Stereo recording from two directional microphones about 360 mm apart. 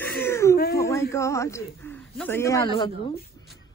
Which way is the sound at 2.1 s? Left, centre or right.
Centre.